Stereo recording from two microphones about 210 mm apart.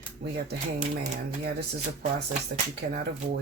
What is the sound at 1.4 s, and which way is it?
Speech, 50° right (ahead or behind).